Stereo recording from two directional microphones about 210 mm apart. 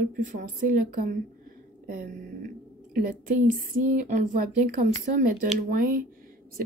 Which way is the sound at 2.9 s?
40° right (ahead or behind).